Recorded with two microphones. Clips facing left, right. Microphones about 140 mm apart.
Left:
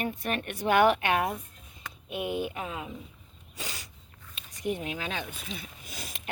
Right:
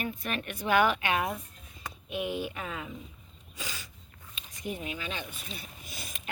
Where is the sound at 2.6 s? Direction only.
15° left (ahead or behind).